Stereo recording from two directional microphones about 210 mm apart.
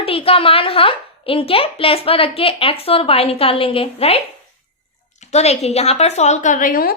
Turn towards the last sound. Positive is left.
turn(degrees=45)  # may be behind; listen again after turning